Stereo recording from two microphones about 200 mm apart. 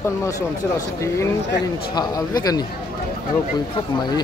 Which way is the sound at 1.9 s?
20° left (ahead or behind).